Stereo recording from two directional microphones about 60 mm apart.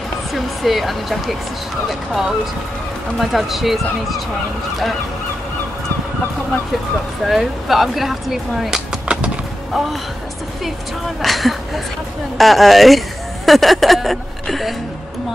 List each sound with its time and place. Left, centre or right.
0.3 s speech: centre
7.2 s speech: centre
9.0 s music: centre
11.2 s speech: centre